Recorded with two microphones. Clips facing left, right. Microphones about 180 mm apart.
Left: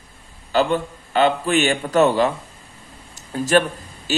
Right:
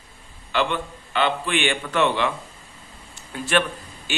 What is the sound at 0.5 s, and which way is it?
Speech, 40° left (ahead or behind).